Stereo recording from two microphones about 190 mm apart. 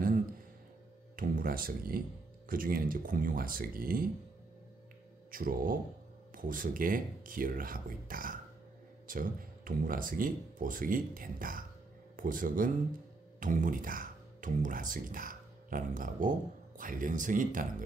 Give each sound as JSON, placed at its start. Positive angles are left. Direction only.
{"t": 1.1, "sound": "speech", "side_deg": -45}
{"t": 5.3, "sound": "speech", "side_deg": -50}